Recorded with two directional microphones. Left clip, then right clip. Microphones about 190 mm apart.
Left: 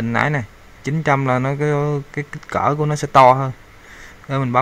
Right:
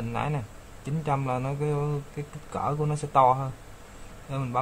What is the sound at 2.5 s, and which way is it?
Speech, 55° left (ahead or behind).